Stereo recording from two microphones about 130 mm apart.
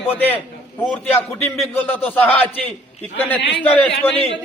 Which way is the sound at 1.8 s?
15° left (ahead or behind).